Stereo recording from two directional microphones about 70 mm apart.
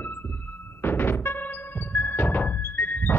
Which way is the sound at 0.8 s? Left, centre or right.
Left.